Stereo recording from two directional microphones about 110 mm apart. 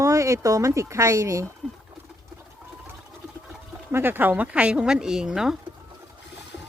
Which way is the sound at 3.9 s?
20° right (ahead or behind).